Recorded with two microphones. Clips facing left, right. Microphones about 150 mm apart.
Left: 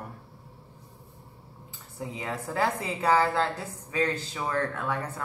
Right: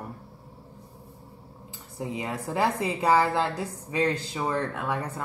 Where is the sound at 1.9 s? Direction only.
15° right (ahead or behind).